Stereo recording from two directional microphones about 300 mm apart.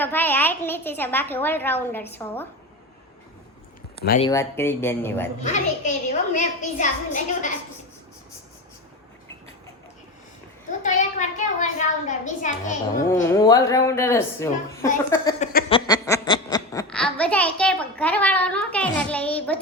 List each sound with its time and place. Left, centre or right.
0.0 s a woman's voice: centre
4.2 s a woman's voice: centre
5.4 s a woman's voice: left
10.8 s a woman's voice: left
13.3 s a woman's voice: centre
15.4 s a sound: left
15.9 s a child's voice: centre